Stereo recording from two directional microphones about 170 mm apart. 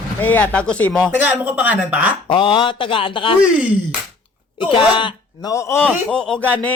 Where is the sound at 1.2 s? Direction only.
10° right (ahead or behind).